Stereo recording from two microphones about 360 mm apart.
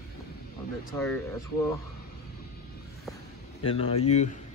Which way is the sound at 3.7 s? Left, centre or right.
Centre.